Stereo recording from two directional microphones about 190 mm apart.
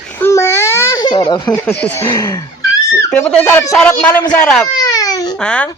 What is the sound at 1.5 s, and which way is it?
Speech, 10° left (ahead or behind).